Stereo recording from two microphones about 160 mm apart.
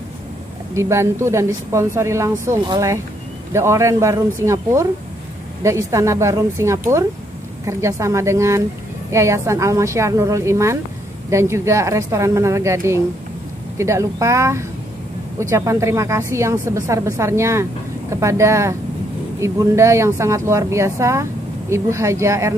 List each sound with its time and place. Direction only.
0.7 s speech: 15° right (ahead or behind)